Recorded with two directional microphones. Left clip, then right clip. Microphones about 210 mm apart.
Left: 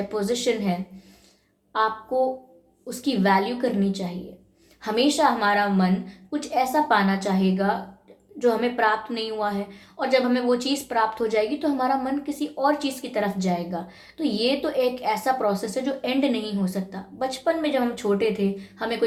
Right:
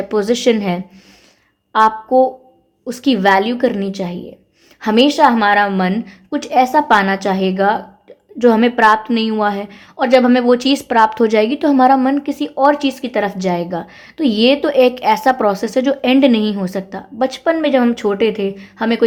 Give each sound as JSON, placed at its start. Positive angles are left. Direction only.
{"t": 0.1, "sound": "a woman's voice", "side_deg": -45}